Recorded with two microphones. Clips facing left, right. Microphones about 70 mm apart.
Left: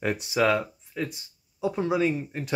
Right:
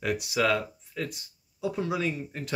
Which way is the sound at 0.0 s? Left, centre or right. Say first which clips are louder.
Left 3 dB; left.